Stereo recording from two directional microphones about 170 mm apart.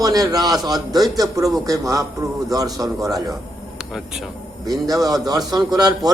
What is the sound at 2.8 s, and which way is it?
Speech, 15° right (ahead or behind).